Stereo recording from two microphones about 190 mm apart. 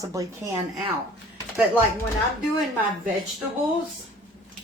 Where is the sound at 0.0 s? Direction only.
15° right (ahead or behind).